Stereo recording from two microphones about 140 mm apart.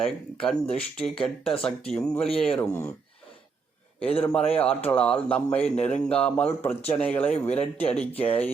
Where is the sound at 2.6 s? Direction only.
20° left (ahead or behind).